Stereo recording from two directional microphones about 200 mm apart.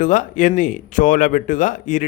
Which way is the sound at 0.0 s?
40° left (ahead or behind).